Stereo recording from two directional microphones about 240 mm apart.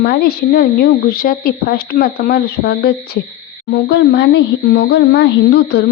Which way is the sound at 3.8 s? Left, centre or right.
Left.